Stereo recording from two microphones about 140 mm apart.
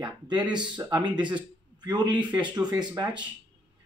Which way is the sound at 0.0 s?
30° right (ahead or behind).